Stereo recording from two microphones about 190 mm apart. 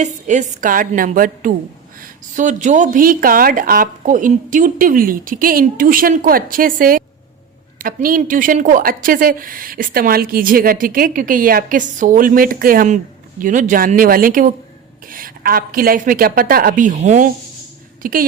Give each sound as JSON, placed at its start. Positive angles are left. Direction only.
{"t": 0.0, "sound": "a woman's voice", "side_deg": -40}